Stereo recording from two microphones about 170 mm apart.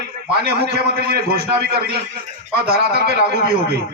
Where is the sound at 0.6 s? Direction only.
65° right (ahead or behind).